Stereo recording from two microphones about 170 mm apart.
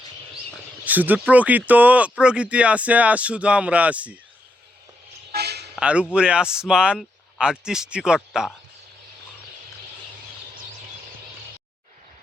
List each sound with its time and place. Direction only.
0.9 s speech: 10° right (ahead or behind)
5.3 s toot: 70° right (ahead or behind)
5.7 s a man's voice: 5° right (ahead or behind)